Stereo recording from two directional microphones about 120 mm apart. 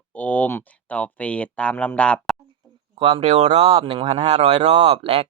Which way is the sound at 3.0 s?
55° right (ahead or behind).